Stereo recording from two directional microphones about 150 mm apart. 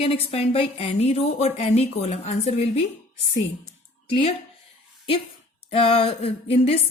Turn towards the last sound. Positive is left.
turn(degrees=40)  # may be behind; listen again after turning